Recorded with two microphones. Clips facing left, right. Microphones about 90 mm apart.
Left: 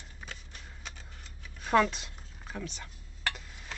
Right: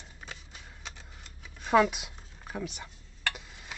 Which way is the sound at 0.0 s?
5° right (ahead or behind).